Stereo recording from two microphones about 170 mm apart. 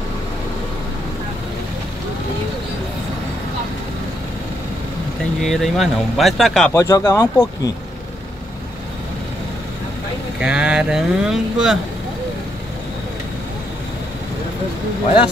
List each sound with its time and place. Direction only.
5.4 s speech: centre (ahead or behind)
6.7 s speech: 15° left (ahead or behind)
10.4 s speech: 5° right (ahead or behind)